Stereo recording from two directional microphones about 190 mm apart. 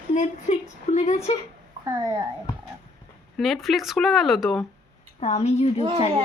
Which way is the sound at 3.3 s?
Centre (ahead or behind).